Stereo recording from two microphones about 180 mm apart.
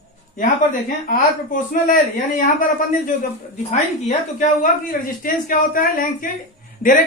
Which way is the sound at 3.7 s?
45° left (ahead or behind).